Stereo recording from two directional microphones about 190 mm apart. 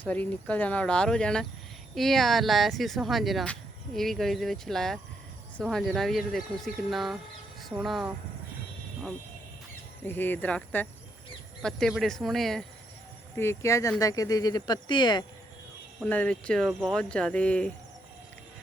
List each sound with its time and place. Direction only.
0.0 s speech: 10° left (ahead or behind)
10.1 s speech: 10° left (ahead or behind)
13.3 s speech: 15° left (ahead or behind)
16.0 s speech: 5° left (ahead or behind)